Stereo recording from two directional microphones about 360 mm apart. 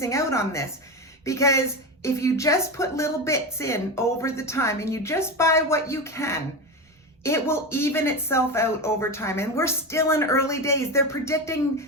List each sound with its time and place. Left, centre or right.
0.0 s a woman's voice: centre